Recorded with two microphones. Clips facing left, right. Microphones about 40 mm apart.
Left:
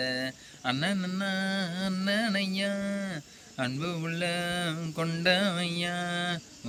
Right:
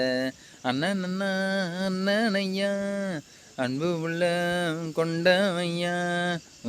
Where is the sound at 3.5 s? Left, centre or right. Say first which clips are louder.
Right 5 dB; left.